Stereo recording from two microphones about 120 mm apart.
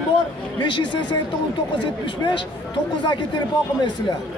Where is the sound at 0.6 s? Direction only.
45° left (ahead or behind).